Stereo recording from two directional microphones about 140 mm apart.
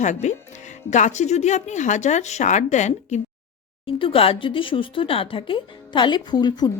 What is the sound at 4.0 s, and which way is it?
Speech, 40° left (ahead or behind).